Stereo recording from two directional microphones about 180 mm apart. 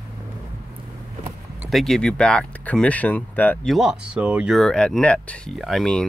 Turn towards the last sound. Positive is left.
turn(degrees=0)  # may be behind; listen again after turning